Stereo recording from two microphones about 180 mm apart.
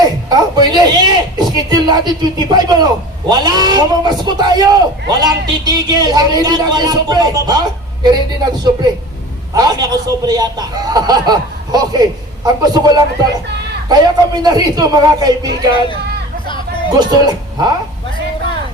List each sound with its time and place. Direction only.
0.0 s speech: 20° right (ahead or behind)
9.6 s speech: 20° right (ahead or behind)
16.9 s speech: 20° right (ahead or behind)